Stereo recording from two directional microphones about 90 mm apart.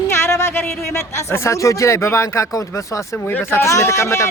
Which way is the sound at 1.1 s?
30° left (ahead or behind).